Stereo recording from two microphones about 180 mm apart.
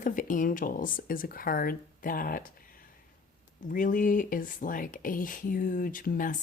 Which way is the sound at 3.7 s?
50° left (ahead or behind).